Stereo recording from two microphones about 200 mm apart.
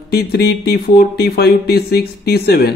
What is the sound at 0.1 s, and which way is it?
Speech, 50° left (ahead or behind).